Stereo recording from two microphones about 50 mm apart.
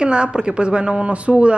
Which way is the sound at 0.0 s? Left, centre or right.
Centre.